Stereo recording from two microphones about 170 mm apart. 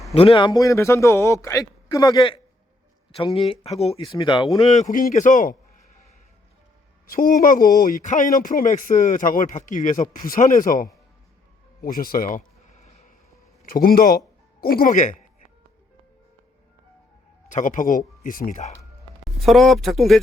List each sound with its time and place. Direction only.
0.1 s a man's voice: 35° left (ahead or behind)
4.6 s speech: 40° left (ahead or behind)
7.1 s speech: 55° left (ahead or behind)
11.8 s a sound: 60° left (ahead or behind)
13.8 s speech: 60° left (ahead or behind)
17.5 s speech: 50° left (ahead or behind)
19.5 s speech: centre (ahead or behind)